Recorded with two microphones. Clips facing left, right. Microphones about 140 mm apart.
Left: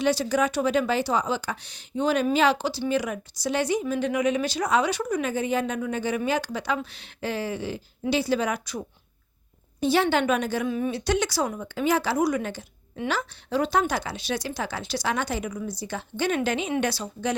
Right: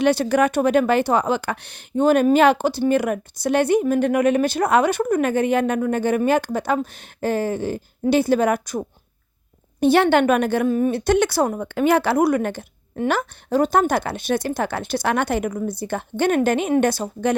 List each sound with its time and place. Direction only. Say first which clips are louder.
0.0 s speech: right 6 dB; 60° right (ahead or behind)
9.8 s speech: right 7 dB; 60° right (ahead or behind)